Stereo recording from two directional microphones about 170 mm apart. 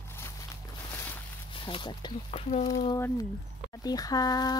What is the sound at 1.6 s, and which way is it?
Speech, 30° left (ahead or behind).